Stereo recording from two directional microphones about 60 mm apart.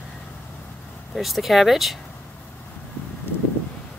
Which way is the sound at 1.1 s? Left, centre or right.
Centre.